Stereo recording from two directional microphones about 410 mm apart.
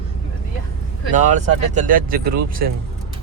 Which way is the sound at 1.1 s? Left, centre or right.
Centre.